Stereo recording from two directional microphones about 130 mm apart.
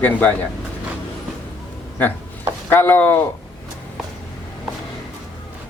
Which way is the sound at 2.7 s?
15° left (ahead or behind).